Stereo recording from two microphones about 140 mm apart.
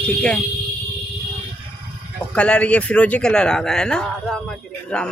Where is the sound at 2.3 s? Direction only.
10° left (ahead or behind).